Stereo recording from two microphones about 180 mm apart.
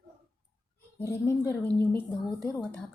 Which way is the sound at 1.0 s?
15° left (ahead or behind).